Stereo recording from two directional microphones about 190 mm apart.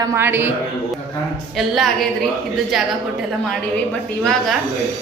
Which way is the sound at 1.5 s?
Centre (ahead or behind).